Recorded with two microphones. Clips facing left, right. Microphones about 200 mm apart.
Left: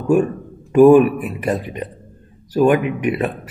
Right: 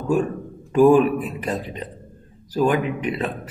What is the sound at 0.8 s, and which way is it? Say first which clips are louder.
Speech: left 4 dB; 10° left (ahead or behind).